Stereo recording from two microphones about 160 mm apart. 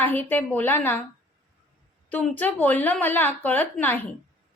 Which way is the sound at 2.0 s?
10° left (ahead or behind).